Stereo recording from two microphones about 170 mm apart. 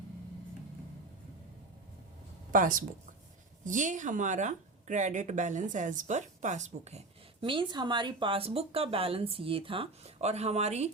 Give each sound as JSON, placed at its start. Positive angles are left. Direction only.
{"t": 2.5, "sound": "speech", "side_deg": -50}
{"t": 7.4, "sound": "speech", "side_deg": -30}